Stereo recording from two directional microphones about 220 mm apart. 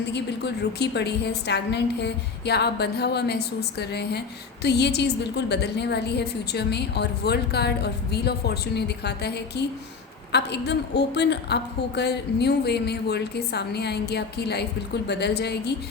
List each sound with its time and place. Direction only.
0.1 s a woman's voice: 50° left (ahead or behind)